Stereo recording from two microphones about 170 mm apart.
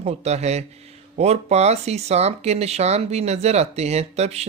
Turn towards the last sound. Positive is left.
turn(degrees=-40)  # may be behind; listen again after turning